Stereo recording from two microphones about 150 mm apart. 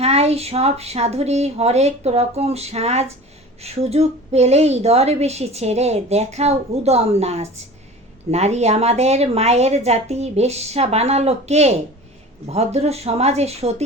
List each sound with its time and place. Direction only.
0.0 s a woman's voice: 45° right (ahead or behind)